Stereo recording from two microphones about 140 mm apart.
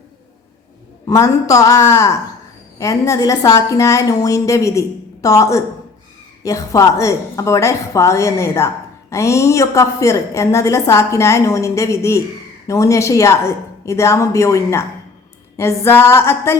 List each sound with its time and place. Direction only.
1.0 s a woman's voice: 25° left (ahead or behind)